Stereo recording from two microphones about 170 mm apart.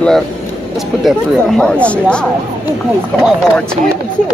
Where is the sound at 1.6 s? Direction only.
5° left (ahead or behind).